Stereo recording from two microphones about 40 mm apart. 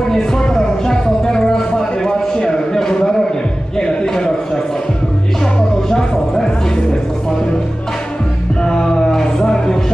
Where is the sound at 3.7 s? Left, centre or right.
Centre.